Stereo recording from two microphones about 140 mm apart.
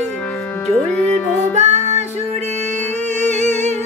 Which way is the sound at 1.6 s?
55° right (ahead or behind).